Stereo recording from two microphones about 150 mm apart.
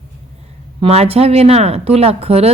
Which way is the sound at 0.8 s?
40° right (ahead or behind).